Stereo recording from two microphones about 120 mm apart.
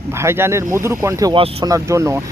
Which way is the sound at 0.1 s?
20° right (ahead or behind).